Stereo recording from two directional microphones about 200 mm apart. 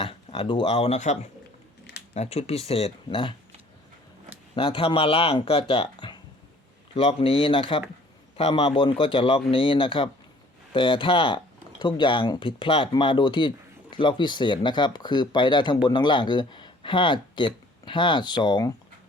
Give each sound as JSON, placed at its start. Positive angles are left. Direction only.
{"t": 0.0, "sound": "speech", "side_deg": 30}
{"t": 4.5, "sound": "speech", "side_deg": 25}